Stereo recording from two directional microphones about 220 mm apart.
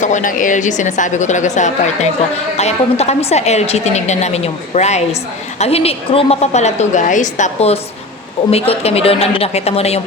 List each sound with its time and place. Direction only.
0.0 s a woman's voice: 35° left (ahead or behind)